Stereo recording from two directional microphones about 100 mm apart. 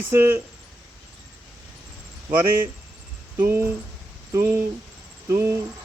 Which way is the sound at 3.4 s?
25° right (ahead or behind).